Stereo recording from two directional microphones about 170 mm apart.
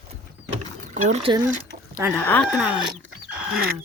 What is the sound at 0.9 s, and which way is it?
Speech, 45° right (ahead or behind).